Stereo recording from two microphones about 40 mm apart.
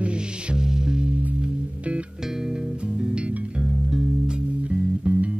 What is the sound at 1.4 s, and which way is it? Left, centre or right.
Music, right.